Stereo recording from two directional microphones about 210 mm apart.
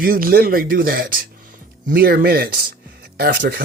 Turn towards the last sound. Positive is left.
turn(degrees=-50)  # may be behind; listen again after turning